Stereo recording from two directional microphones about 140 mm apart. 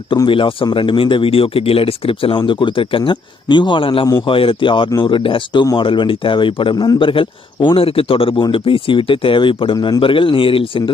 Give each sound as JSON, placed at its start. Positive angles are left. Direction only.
{"t": 0.3, "sound": "a man's voice", "side_deg": 40}